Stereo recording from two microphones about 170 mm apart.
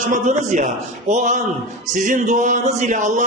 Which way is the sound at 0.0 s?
50° right (ahead or behind).